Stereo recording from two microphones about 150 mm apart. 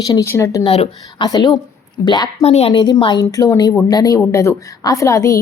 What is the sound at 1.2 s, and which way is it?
A woman's voice, 25° left (ahead or behind).